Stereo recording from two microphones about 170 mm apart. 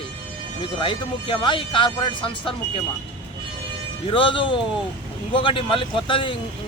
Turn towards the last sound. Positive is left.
turn(degrees=30)  # may be behind; listen again after turning